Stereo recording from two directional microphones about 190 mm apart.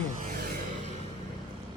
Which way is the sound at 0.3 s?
50° right (ahead or behind).